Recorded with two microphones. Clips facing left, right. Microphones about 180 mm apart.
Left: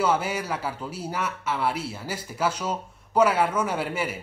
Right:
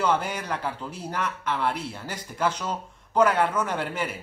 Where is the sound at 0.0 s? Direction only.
5° left (ahead or behind).